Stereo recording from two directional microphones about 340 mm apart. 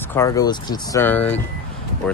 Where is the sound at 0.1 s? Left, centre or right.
Centre.